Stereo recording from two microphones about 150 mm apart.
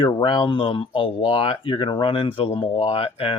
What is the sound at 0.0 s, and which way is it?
Speech, 35° left (ahead or behind).